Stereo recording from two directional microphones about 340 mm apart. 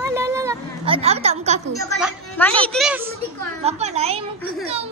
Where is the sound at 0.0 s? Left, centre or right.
Centre.